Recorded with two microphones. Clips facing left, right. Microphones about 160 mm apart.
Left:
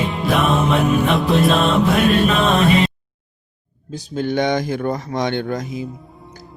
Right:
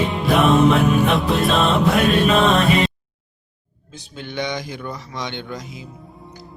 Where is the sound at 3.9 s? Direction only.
40° left (ahead or behind).